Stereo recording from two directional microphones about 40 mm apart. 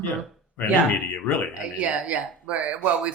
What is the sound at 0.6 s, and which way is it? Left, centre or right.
Speech, left.